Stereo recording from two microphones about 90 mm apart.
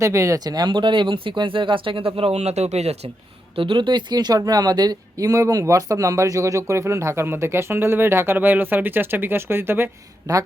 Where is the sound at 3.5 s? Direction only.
70° right (ahead or behind); by 9.9 s 25° right (ahead or behind).